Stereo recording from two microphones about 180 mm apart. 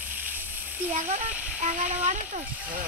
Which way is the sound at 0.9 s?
45° right (ahead or behind).